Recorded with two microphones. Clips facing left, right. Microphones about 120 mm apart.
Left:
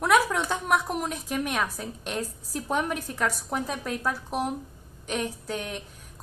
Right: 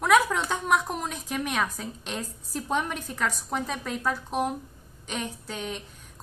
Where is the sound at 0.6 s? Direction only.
10° left (ahead or behind).